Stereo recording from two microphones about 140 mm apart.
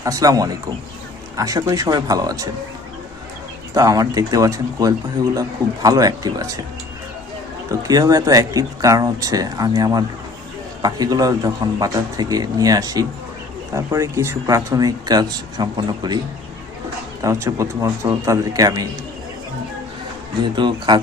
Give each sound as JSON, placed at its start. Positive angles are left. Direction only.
{"t": 0.0, "sound": "speech", "side_deg": -25}
{"t": 3.8, "sound": "speech", "side_deg": -25}
{"t": 7.7, "sound": "speech", "side_deg": -25}
{"t": 17.2, "sound": "speech", "side_deg": -20}
{"t": 20.6, "sound": "speech", "side_deg": -35}